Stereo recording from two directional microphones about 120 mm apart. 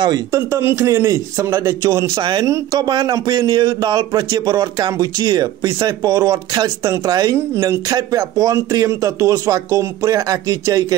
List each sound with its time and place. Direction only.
0.0 s speech: 30° right (ahead or behind)
2.1 s a man's voice: 40° right (ahead or behind)
2.4 s speech: 25° right (ahead or behind)
2.9 s a man's voice: 35° right (ahead or behind)
7.3 s speech: 25° right (ahead or behind)